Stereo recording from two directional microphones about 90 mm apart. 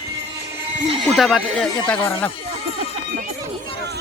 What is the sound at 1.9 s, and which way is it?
Speech, 20° left (ahead or behind).